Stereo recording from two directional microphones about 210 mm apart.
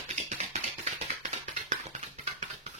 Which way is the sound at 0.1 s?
30° right (ahead or behind).